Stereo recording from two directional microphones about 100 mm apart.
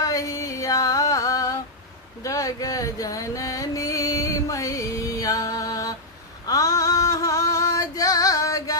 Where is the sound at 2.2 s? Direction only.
35° left (ahead or behind).